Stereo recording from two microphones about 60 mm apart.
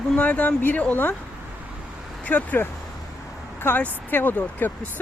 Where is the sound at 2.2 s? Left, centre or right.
Left.